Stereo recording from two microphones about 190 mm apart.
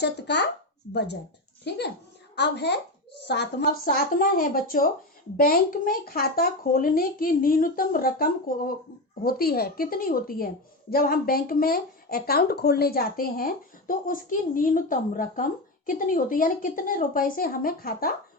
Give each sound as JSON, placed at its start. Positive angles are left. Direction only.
{"t": 0.0, "sound": "speech", "side_deg": 60}